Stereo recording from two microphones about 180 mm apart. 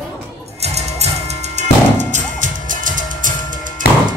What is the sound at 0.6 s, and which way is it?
Music, 35° right (ahead or behind).